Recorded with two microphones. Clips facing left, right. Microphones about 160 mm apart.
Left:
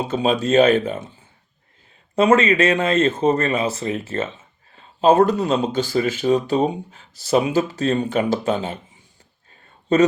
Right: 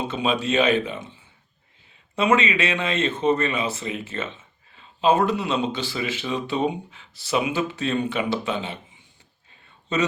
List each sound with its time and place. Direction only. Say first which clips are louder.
0.0 s speech: left 4 dB; 40° left (ahead or behind)
2.1 s speech: left 5 dB; 45° left (ahead or behind)
9.9 s speech: left 8 dB; 50° left (ahead or behind)